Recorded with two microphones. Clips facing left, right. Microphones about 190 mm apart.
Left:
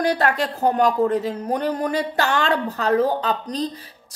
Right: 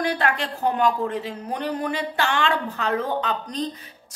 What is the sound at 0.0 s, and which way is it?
A woman's voice, 40° left (ahead or behind).